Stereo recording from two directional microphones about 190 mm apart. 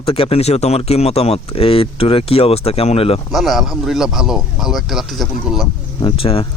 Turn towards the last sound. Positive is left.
turn(degrees=30)  # may be behind; listen again after turning